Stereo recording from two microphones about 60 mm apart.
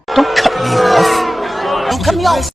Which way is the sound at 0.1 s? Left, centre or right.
Centre.